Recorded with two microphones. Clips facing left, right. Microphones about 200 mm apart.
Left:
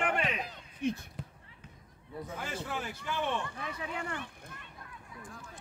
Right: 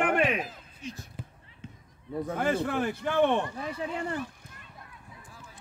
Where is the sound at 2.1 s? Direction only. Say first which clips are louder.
Right 11 dB; 60° right (ahead or behind).